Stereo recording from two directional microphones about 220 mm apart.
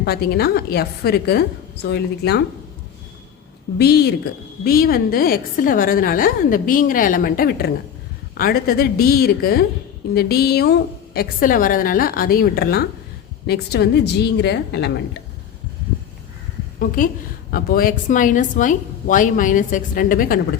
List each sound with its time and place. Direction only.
0.0 s a woman's voice: 45° left (ahead or behind)
3.8 s a woman's voice: 45° left (ahead or behind)
16.8 s a woman's voice: 40° left (ahead or behind)